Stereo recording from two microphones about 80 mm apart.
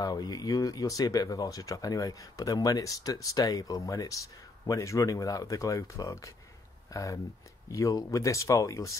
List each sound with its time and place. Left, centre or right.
0.0 s speech: left